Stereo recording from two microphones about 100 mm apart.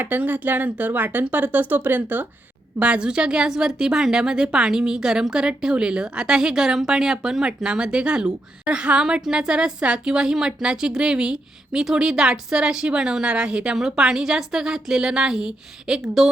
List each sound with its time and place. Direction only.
0.0 s a woman's voice: 15° right (ahead or behind)